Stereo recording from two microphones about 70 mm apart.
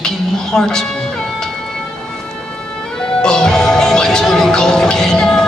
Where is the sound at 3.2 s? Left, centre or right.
Centre.